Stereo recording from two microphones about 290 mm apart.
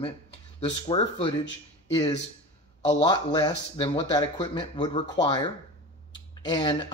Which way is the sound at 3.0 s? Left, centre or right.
Centre.